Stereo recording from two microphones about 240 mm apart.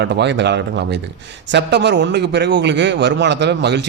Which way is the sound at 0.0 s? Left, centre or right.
Right.